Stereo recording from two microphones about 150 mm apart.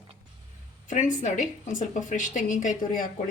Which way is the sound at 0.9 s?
55° left (ahead or behind).